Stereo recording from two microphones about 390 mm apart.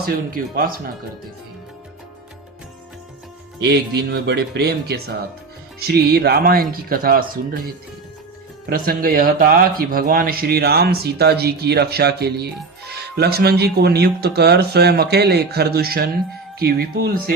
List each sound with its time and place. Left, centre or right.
0.0 s speech: right
3.6 s speech: right
8.7 s speech: right